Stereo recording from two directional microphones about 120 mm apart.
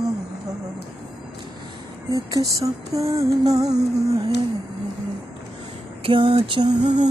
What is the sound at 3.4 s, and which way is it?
Music, 30° right (ahead or behind).